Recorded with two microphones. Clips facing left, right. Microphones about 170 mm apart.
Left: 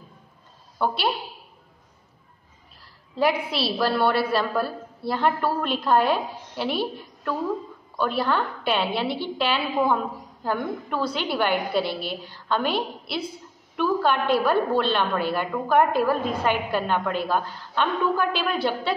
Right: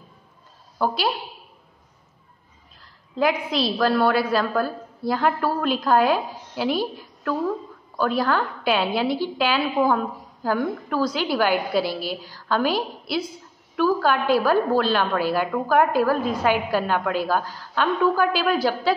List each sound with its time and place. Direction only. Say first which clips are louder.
0.7 s a woman's voice: right 1 dB; centre (ahead or behind)
3.2 s a woman's voice: right 1 dB; 5° left (ahead or behind)
7.9 s a woman's voice: right 2 dB; centre (ahead or behind)